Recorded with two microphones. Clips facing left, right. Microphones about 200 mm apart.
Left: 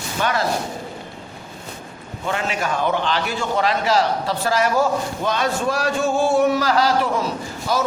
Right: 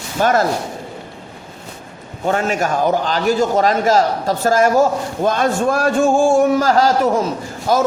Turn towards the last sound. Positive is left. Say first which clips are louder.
# right 5 dB
turn(degrees=-50)  # may be behind; listen again after turning